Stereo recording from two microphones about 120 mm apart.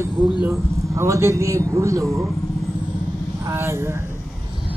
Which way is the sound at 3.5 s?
20° right (ahead or behind).